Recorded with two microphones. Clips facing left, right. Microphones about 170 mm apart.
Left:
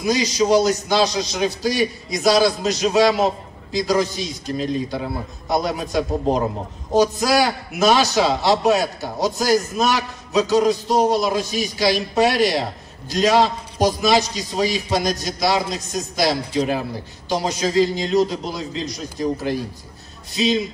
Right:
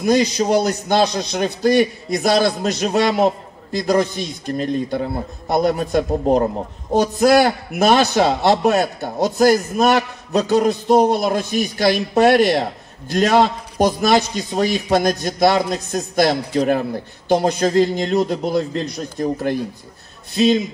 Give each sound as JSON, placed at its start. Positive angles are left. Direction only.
{"t": 0.0, "sound": "a man's voice", "side_deg": -55}